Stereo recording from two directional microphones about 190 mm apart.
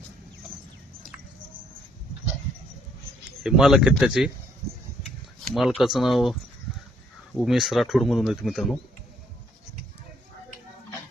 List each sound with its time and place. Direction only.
3.4 s speech: centre (ahead or behind)
5.5 s speech: centre (ahead or behind)
7.3 s speech: centre (ahead or behind)